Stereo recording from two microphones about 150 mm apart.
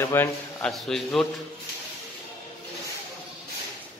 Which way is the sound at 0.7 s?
Centre (ahead or behind).